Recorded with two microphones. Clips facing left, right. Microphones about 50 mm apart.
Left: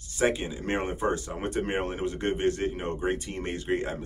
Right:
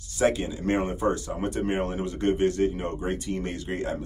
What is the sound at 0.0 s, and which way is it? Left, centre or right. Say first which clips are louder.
Speech: right 2 dB; left.